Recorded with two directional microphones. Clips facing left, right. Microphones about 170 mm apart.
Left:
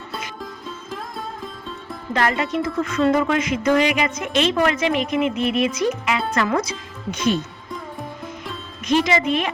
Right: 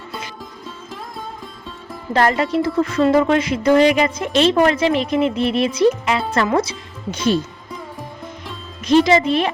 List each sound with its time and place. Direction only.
2.1 s speech: 35° right (ahead or behind)
9.0 s speech: 35° right (ahead or behind)